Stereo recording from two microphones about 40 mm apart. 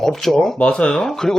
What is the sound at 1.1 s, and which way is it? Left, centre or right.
Speech, centre.